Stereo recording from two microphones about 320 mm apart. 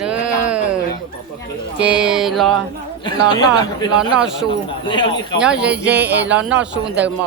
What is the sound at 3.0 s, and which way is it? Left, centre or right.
Speech, centre.